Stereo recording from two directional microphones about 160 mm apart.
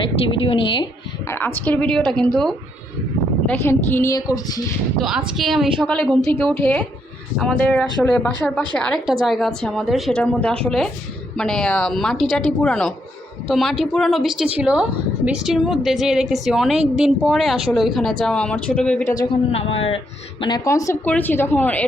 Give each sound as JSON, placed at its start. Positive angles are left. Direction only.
{"t": 0.2, "sound": "a woman's voice", "side_deg": 35}
{"t": 1.3, "sound": "speech", "side_deg": 15}
{"t": 2.0, "sound": "a woman's voice", "side_deg": -30}
{"t": 3.4, "sound": "speech", "side_deg": 10}
{"t": 4.9, "sound": "a woman's voice", "side_deg": 0}
{"t": 19.0, "sound": "speech", "side_deg": 20}
{"t": 19.3, "sound": "a woman's voice", "side_deg": 35}
{"t": 20.7, "sound": "speech", "side_deg": 20}